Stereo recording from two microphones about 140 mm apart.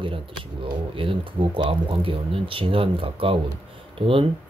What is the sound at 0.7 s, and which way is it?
Speech, 35° right (ahead or behind).